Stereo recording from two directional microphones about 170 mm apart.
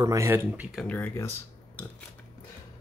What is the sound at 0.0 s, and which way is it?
Speech, 20° right (ahead or behind).